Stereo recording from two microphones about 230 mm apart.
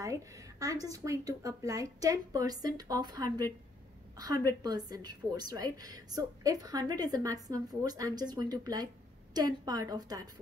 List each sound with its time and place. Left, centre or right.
0.0 s a woman's voice: centre
4.5 s a woman's voice: centre